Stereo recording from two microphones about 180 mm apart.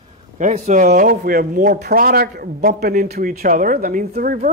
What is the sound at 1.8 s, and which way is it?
A man's voice, 60° right (ahead or behind).